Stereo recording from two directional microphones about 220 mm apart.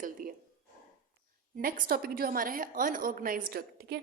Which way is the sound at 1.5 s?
40° right (ahead or behind).